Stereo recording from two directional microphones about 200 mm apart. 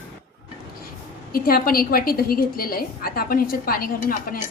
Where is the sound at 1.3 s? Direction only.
45° left (ahead or behind).